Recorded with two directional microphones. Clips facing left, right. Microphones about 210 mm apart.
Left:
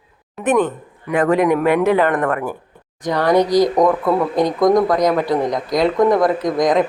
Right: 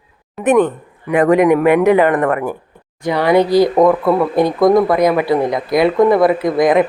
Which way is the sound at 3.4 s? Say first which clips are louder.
Right 3 dB; 15° left (ahead or behind).